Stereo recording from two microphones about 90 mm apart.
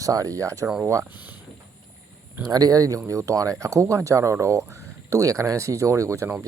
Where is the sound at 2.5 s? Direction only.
45° right (ahead or behind).